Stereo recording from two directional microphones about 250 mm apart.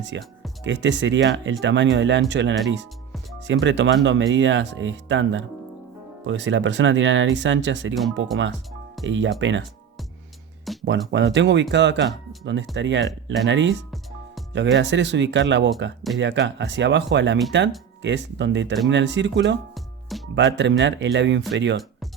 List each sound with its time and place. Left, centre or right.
0.1 s speech: right
10.7 s a sound: centre
11.1 s speech: right
19.7 s music: centre
20.3 s speech: right